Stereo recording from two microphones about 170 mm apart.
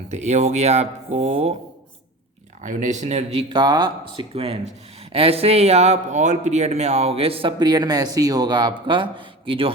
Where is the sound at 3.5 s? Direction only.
25° right (ahead or behind).